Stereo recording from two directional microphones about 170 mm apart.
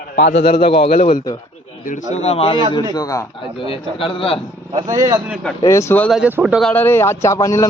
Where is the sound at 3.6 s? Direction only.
30° left (ahead or behind).